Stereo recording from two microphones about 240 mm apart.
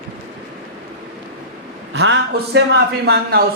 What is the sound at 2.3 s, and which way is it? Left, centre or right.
Speech, right.